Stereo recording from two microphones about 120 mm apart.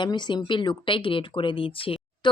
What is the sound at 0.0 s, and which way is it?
Speech, 40° left (ahead or behind).